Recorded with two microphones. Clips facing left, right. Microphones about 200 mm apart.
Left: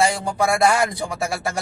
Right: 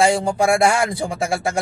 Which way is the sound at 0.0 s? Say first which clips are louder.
Right 4 dB; 25° right (ahead or behind).